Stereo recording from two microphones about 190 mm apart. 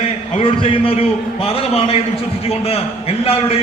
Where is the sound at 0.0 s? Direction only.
30° left (ahead or behind).